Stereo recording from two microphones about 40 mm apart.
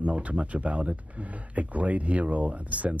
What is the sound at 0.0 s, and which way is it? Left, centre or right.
Speech, right.